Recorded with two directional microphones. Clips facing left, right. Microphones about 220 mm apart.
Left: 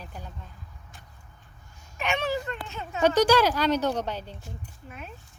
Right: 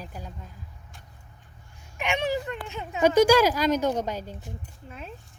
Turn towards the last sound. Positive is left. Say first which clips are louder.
# right 2 dB
turn(degrees=-10)  # may be behind; listen again after turning